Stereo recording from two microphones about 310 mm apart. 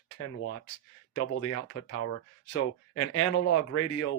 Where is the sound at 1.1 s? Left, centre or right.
Left.